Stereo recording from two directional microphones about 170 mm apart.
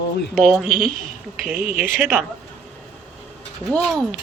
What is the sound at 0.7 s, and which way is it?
A woman's voice, 60° right (ahead or behind).